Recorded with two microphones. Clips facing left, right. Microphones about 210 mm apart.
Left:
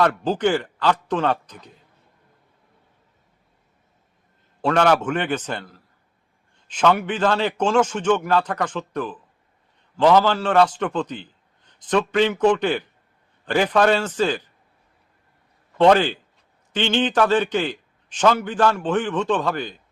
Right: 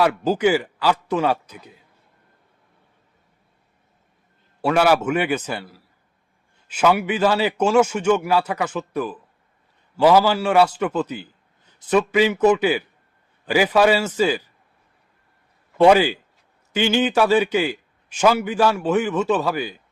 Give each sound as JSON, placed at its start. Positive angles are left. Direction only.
{"t": 0.0, "sound": "a man's voice", "side_deg": -5}
{"t": 4.6, "sound": "a man's voice", "side_deg": -10}
{"t": 15.8, "sound": "a man's voice", "side_deg": -10}